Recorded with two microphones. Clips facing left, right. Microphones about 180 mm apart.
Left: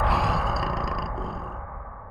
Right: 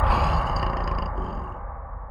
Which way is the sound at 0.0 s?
Centre (ahead or behind).